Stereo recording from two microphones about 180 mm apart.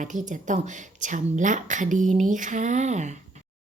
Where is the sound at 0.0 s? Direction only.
45° right (ahead or behind).